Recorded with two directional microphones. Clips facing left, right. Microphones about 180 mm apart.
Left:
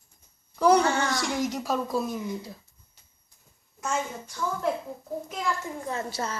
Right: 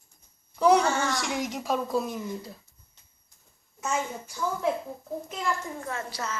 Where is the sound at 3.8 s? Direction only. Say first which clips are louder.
Even; 5° right (ahead or behind).